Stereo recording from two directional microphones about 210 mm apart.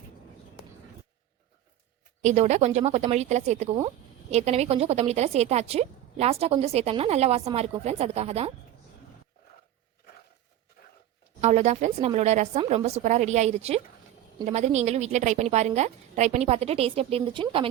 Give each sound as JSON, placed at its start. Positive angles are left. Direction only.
{"t": 2.2, "sound": "a woman's voice", "side_deg": -35}
{"t": 11.3, "sound": "a woman's voice", "side_deg": -35}